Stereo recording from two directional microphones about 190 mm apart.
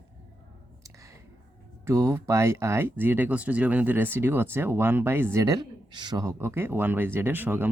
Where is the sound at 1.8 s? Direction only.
15° right (ahead or behind).